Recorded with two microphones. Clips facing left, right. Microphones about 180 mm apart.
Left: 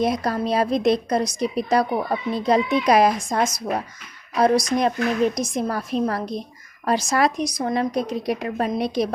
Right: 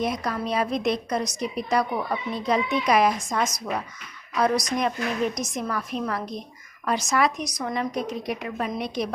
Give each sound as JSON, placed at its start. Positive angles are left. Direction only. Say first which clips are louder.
{"t": 0.0, "sound": "a woman's voice", "louder": "left 5 dB", "side_deg": 35}